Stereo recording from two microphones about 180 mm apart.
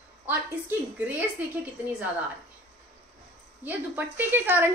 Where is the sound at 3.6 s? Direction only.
10° right (ahead or behind).